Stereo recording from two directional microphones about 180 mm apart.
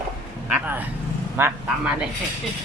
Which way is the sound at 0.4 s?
10° right (ahead or behind).